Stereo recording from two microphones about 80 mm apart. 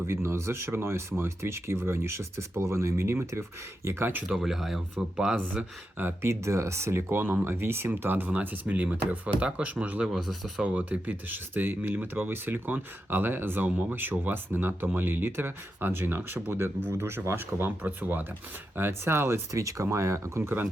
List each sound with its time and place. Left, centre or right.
0.0 s speech: right
4.3 s speech: centre
6.0 s speech: right
10.1 s speech: centre
10.6 s speech: centre